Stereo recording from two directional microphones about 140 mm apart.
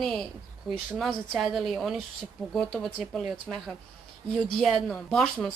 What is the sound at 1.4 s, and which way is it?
Speech, centre (ahead or behind).